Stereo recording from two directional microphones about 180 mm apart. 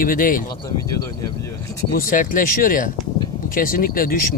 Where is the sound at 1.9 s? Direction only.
50° left (ahead or behind).